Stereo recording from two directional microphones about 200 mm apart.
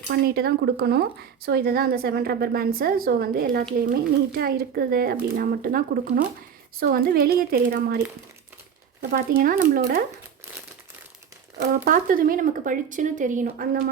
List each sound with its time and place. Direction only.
0.1 s speech: 50° right (ahead or behind)
9.0 s speech: 45° right (ahead or behind)
11.6 s speech: 45° right (ahead or behind)